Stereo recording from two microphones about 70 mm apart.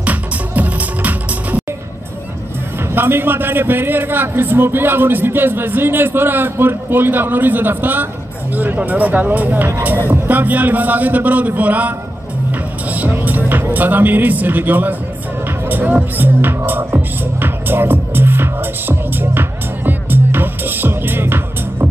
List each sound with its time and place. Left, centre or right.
0.0 s music: right
2.9 s a man's voice: right
9.9 s a man's voice: right
12.4 s music: right
13.7 s a man's voice: right
15.6 s music: right